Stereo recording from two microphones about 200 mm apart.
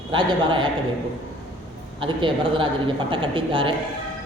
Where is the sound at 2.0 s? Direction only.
25° right (ahead or behind).